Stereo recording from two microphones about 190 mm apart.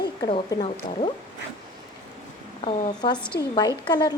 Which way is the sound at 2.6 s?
25° left (ahead or behind).